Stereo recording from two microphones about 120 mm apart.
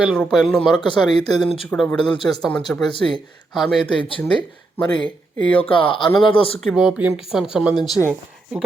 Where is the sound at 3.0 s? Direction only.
5° left (ahead or behind).